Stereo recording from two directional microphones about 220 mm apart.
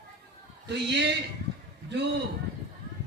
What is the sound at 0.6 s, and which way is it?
Speech, 50° right (ahead or behind).